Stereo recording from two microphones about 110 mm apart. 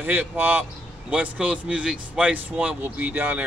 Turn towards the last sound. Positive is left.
turn(degrees=-15)  # may be behind; listen again after turning